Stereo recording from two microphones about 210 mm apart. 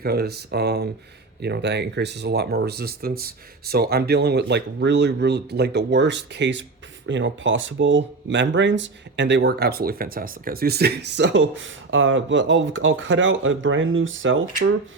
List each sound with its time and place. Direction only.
0.0 s speech: 50° right (ahead or behind); by 14.7 s 65° right (ahead or behind)